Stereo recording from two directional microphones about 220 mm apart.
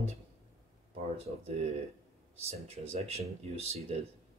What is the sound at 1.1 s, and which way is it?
Speech, 25° right (ahead or behind).